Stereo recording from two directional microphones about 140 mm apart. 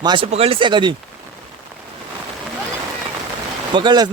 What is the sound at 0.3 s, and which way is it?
Speech, 45° right (ahead or behind).